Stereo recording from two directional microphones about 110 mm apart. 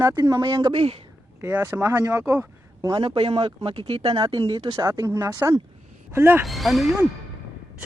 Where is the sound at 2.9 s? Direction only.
45° right (ahead or behind); by 4.1 s 70° right (ahead or behind).